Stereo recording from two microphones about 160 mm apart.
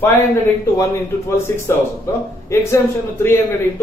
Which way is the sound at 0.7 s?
20° left (ahead or behind).